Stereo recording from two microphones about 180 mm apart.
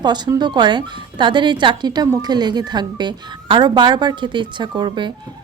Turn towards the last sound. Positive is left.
turn(degrees=-25)  # may be behind; listen again after turning